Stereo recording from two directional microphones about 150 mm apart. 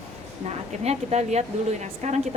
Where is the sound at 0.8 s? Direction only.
45° right (ahead or behind).